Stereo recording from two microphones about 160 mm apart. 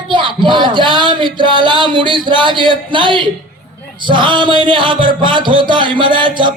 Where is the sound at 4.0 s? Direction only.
30° right (ahead or behind).